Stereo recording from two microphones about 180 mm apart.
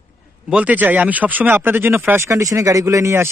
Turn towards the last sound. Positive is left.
turn(degrees=-15)  # may be behind; listen again after turning